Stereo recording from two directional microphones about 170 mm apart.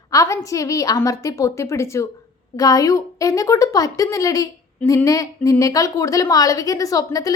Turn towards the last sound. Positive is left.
turn(degrees=20)  # may be behind; listen again after turning